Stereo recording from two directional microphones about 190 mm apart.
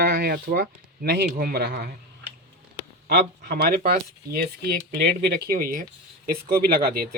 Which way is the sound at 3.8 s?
40° right (ahead or behind).